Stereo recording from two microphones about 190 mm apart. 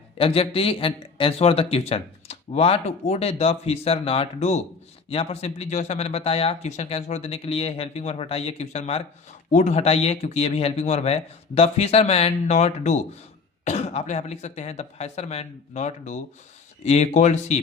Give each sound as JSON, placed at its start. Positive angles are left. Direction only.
{"t": 0.2, "sound": "speech", "side_deg": 30}